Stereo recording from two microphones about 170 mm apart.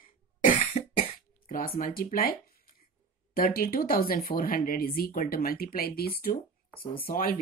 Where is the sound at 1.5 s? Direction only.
55° left (ahead or behind).